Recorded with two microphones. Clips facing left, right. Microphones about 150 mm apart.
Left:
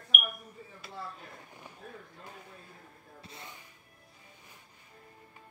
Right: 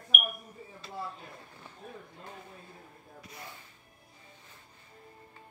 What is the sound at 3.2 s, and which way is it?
Speech, 25° left (ahead or behind).